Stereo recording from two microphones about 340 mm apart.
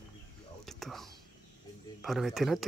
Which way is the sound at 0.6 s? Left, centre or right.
Centre.